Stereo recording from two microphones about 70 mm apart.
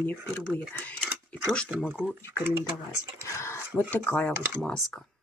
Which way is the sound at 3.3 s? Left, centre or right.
Left.